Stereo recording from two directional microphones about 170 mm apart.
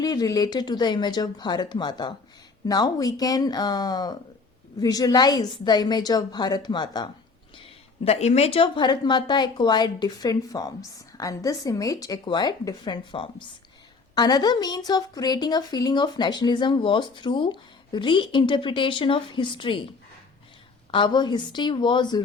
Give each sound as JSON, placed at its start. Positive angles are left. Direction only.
{"t": 0.0, "sound": "a woman's voice", "side_deg": 20}
{"t": 20.9, "sound": "a woman's voice", "side_deg": 25}